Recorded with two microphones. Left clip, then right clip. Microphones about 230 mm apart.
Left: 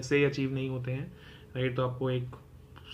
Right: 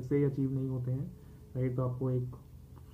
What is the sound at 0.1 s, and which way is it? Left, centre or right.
Speech, left.